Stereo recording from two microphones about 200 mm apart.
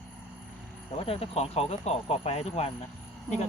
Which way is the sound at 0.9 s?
30° left (ahead or behind).